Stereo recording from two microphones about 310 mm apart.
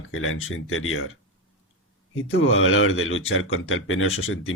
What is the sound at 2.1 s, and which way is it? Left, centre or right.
A man's voice, left.